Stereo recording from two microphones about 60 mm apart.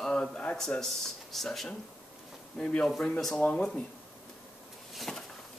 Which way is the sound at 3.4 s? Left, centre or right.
Centre.